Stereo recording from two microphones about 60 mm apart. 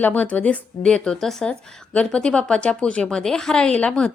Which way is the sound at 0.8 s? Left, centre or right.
Centre.